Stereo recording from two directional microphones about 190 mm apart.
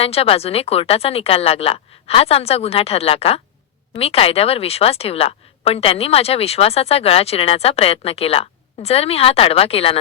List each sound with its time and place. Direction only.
0.0 s a woman's voice: 30° left (ahead or behind)